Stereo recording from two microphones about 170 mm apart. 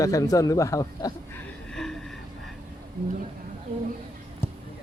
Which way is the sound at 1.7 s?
Centre (ahead or behind).